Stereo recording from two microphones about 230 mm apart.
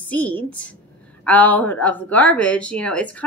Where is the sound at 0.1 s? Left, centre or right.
Centre.